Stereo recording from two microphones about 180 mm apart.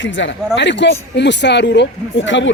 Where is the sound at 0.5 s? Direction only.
80° left.